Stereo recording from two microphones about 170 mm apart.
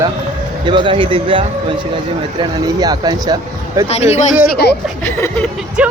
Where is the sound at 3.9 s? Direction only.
40° left (ahead or behind).